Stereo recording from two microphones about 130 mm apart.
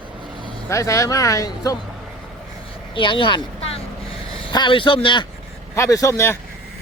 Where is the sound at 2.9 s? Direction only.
40° left (ahead or behind).